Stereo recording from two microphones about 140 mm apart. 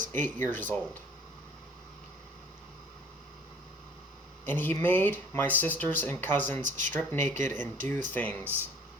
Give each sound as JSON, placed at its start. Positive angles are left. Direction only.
{"t": 0.1, "sound": "speech", "side_deg": 15}
{"t": 4.4, "sound": "speech", "side_deg": 15}
{"t": 6.6, "sound": "speech", "side_deg": -60}
{"t": 6.9, "sound": "speech", "side_deg": 15}